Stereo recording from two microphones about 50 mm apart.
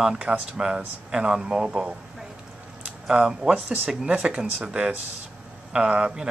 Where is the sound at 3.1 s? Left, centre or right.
Centre.